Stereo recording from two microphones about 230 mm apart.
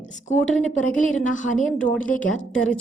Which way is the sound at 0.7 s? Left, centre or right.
Left.